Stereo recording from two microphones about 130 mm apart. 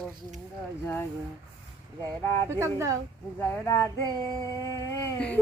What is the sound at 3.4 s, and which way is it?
Speech, 20° left (ahead or behind).